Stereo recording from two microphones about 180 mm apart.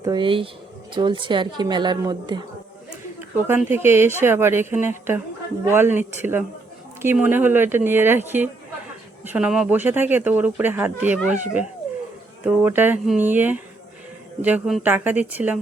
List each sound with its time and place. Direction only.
0.0 s a woman's voice: 25° right (ahead or behind)
3.2 s speech: 10° right (ahead or behind)
11.3 s speech: 45° right (ahead or behind)
12.4 s speech: 10° right (ahead or behind)